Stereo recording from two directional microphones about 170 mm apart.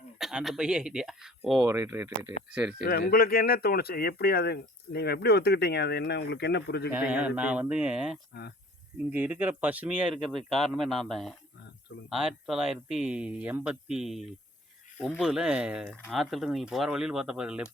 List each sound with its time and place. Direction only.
0.2 s speech: centre (ahead or behind)
1.6 s speech: 15° right (ahead or behind)
2.8 s speech: 65° left (ahead or behind)
7.1 s speech: 10° right (ahead or behind)
8.3 s speech: 75° left (ahead or behind)
9.0 s speech: 10° right (ahead or behind)